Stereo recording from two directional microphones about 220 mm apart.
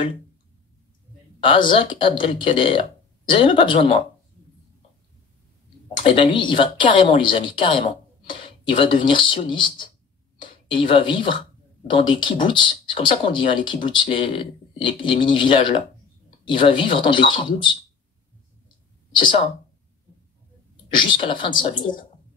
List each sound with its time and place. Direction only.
1.4 s a woman's voice: 20° left (ahead or behind)
6.0 s a woman's voice: 25° left (ahead or behind)
19.1 s speech: 20° left (ahead or behind)
20.9 s a woman's voice: 20° left (ahead or behind)